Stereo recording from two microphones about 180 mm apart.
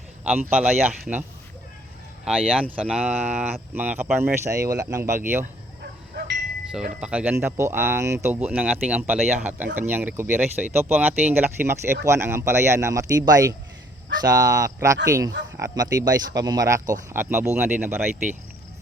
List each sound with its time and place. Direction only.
0.3 s speech: 10° right (ahead or behind)
2.2 s speech: 5° right (ahead or behind)
5.8 s a sound: 65° right (ahead or behind)
7.0 s speech: 5° right (ahead or behind)